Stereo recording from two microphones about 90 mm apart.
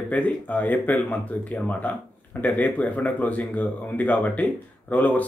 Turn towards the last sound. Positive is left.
turn(degrees=15)  # may be behind; listen again after turning